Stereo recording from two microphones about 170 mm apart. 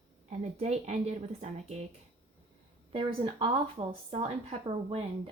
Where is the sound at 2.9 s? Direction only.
30° right (ahead or behind).